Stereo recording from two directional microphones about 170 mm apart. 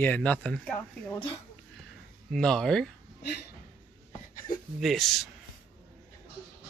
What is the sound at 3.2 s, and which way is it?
Speech, 75° left (ahead or behind).